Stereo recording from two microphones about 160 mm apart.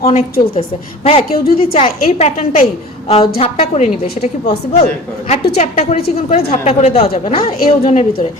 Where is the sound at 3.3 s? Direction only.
35° left (ahead or behind).